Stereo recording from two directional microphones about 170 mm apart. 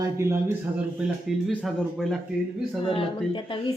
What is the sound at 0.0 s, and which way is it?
Speech, 15° right (ahead or behind).